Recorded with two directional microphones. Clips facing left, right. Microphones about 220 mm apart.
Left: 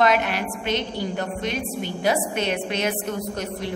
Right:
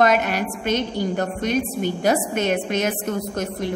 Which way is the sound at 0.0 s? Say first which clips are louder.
Right 2 dB; 45° right (ahead or behind).